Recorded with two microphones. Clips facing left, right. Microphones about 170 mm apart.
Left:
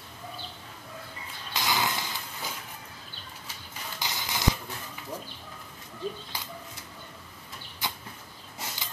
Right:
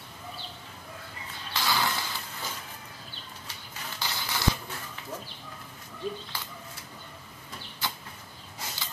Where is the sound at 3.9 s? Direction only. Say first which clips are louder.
Even; 15° left (ahead or behind).